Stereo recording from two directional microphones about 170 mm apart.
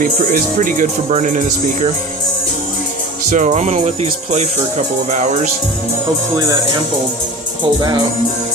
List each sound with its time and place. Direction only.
0.0 s music: 55° right (ahead or behind)
3.2 s music: 45° right (ahead or behind)